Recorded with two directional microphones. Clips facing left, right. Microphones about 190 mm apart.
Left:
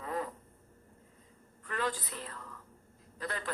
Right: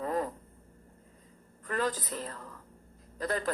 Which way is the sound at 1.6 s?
40° right (ahead or behind).